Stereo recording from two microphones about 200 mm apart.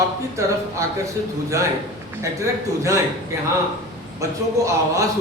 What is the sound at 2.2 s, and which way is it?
Speech, 15° right (ahead or behind).